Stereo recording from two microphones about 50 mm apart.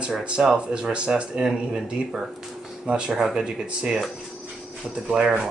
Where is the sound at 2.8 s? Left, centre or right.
Right.